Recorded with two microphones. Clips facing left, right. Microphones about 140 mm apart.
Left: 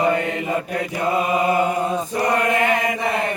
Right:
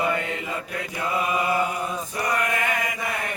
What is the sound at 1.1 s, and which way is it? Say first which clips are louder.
Mantra: left 4 dB; 30° left (ahead or behind).